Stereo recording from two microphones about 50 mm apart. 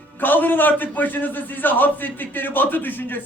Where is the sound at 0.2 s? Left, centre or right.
Left.